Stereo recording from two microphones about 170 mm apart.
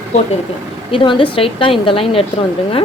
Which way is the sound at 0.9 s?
30° left (ahead or behind).